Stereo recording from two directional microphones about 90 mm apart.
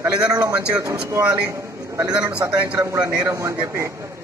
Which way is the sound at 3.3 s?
35° right (ahead or behind).